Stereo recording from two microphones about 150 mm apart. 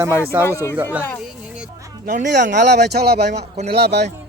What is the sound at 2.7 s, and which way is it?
Speech, 90° right.